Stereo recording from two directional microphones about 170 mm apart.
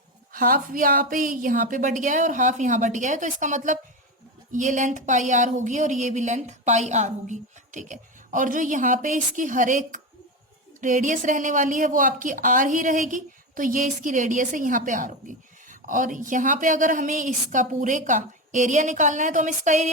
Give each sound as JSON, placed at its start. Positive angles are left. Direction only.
{"t": 0.3, "sound": "speech", "side_deg": -55}